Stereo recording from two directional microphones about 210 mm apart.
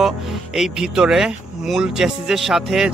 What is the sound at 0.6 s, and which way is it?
Speech, 5° right (ahead or behind).